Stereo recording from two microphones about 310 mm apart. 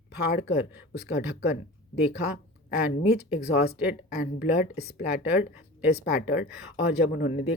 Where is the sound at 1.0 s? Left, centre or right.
Centre.